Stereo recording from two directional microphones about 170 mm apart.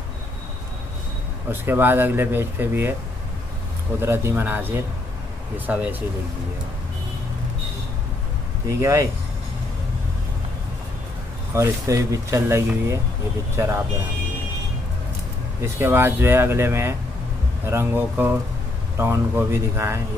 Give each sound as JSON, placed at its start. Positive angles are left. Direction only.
{"t": 1.5, "sound": "speech", "side_deg": -10}
{"t": 4.0, "sound": "speech", "side_deg": -15}
{"t": 8.6, "sound": "speech", "side_deg": -20}
{"t": 11.5, "sound": "speech", "side_deg": -15}
{"t": 15.6, "sound": "speech", "side_deg": -15}